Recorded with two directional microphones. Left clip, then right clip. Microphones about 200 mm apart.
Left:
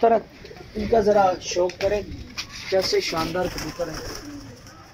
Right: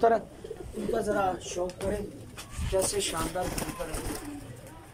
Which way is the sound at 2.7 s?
40° left (ahead or behind).